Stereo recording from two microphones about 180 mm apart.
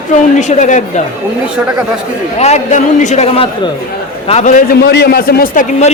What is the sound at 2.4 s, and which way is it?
A man's voice, 40° left (ahead or behind).